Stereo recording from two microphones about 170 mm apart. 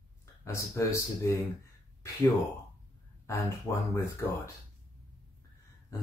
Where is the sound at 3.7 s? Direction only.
15° left (ahead or behind).